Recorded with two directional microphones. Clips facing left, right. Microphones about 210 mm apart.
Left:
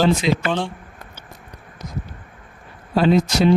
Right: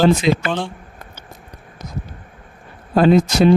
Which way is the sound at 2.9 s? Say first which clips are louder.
Right 3 dB; 50° right (ahead or behind).